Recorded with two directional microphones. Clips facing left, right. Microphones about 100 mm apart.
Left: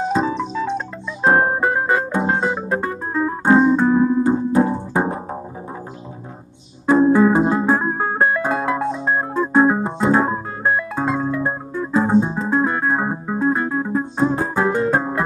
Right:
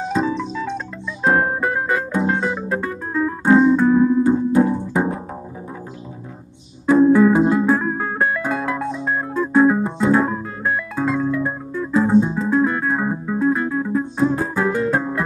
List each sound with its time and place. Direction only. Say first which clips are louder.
0.0 s keyboard: left 1 dB; 30° left (ahead or behind)
6.9 s music: right 1 dB; 25° left (ahead or behind)
8.5 s keyboard: left 2 dB; 30° left (ahead or behind)
14.8 s music: left 1 dB; 30° left (ahead or behind)